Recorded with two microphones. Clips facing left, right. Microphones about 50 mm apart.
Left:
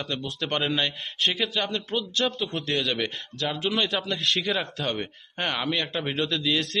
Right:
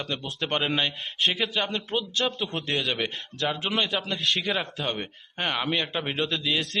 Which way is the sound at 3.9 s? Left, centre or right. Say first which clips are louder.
Left 1 dB; centre.